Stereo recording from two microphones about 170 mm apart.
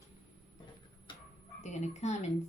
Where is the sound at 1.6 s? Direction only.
45° left (ahead or behind).